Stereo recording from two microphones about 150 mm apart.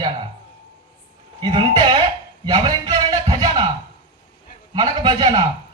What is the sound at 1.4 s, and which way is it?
Speech, 30° right (ahead or behind).